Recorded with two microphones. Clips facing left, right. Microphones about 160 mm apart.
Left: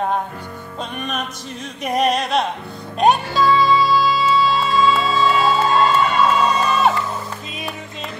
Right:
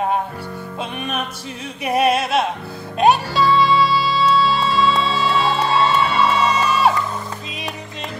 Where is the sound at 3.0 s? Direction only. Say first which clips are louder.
Even; centre (ahead or behind).